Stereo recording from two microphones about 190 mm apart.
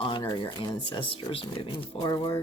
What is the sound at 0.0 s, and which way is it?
Speech, 25° left (ahead or behind).